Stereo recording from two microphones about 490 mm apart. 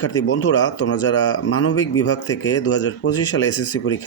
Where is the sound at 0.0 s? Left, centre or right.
Left.